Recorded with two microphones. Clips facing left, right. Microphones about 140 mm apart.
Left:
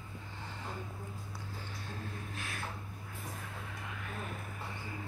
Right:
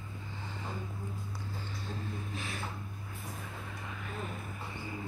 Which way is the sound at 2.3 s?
Centre (ahead or behind).